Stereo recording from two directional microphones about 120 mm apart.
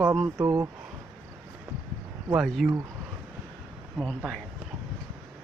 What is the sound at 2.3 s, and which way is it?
Speech, 5° right (ahead or behind).